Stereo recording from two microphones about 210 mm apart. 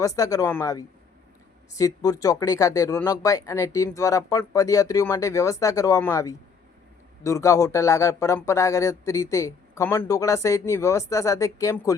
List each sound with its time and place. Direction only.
0.0 s speech: 15° left (ahead or behind)